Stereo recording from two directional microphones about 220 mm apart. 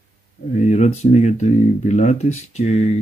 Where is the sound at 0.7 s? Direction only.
30° left (ahead or behind).